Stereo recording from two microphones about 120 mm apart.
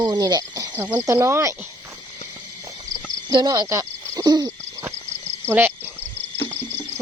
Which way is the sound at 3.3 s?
35° right (ahead or behind).